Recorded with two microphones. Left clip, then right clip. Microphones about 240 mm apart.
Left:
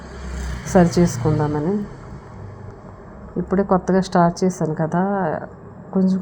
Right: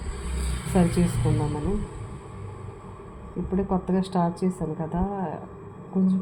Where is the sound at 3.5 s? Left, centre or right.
Left.